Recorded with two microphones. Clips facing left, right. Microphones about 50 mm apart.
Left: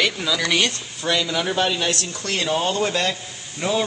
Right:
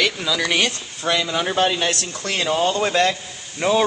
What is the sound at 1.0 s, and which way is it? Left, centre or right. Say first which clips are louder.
Speech: right 1 dB; right.